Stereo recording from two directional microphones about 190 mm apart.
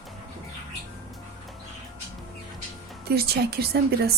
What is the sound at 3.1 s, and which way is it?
A woman's voice, 55° right (ahead or behind).